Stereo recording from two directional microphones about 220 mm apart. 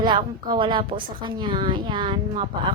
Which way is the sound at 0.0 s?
20° right (ahead or behind).